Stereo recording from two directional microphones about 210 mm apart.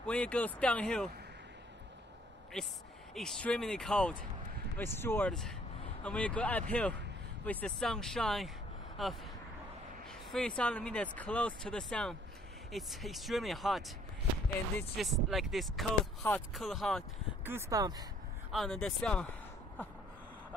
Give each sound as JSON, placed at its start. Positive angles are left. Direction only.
{"t": 0.0, "sound": "speech", "side_deg": 5}
{"t": 2.6, "sound": "speech", "side_deg": 5}
{"t": 17.5, "sound": "speech", "side_deg": -15}
{"t": 18.5, "sound": "speech", "side_deg": 0}